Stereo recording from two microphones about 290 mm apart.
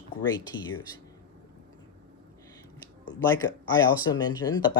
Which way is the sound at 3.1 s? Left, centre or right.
Centre.